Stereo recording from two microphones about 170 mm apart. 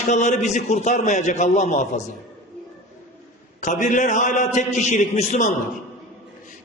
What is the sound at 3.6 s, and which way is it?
A man's voice, 45° left (ahead or behind).